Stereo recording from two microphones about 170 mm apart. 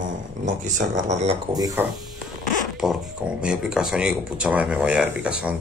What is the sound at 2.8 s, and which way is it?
Speech, 5° right (ahead or behind).